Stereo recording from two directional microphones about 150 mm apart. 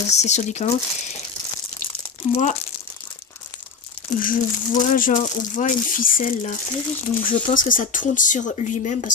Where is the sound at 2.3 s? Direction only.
55° left (ahead or behind).